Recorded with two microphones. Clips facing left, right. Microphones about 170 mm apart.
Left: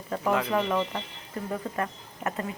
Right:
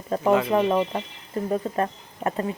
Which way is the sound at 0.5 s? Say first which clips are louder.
Right 5 dB; 20° right (ahead or behind).